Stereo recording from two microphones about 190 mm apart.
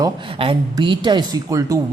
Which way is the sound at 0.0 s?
25° right (ahead or behind).